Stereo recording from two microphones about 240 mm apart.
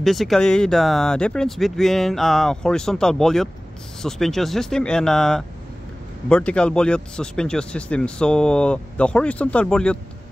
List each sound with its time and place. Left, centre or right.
0.0 s a man's voice: centre